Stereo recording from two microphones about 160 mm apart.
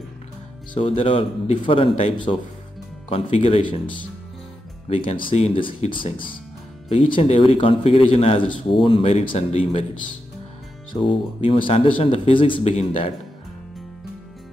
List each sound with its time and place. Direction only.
0.7 s a man's voice: 35° left (ahead or behind)
4.8 s a man's voice: 35° left (ahead or behind)
11.0 s a man's voice: 35° left (ahead or behind)